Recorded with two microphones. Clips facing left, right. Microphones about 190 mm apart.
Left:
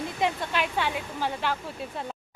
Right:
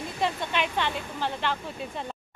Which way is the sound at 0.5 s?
5° left (ahead or behind).